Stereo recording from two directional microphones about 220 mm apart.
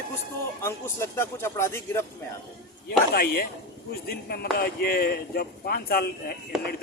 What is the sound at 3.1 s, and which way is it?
Speech, 45° left (ahead or behind).